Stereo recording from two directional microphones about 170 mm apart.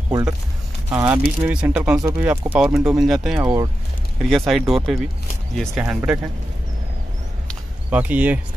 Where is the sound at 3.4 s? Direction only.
20° right (ahead or behind).